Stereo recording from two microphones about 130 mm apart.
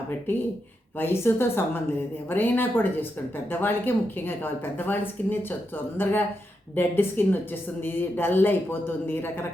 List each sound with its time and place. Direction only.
0.9 s speech: 15° left (ahead or behind)